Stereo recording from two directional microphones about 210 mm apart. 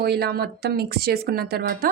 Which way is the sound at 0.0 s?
50° right (ahead or behind).